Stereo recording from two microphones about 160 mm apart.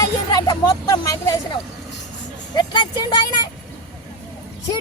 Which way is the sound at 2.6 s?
30° left (ahead or behind).